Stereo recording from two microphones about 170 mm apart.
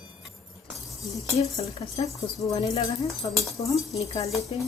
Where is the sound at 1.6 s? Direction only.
35° left (ahead or behind).